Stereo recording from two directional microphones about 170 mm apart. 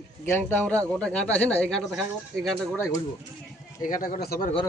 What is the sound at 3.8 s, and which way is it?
Speech, 50° left (ahead or behind).